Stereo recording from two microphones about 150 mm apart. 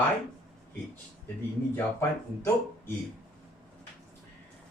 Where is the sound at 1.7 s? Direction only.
15° left (ahead or behind).